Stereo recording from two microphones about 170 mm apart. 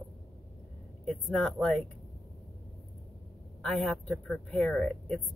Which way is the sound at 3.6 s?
5° left (ahead or behind).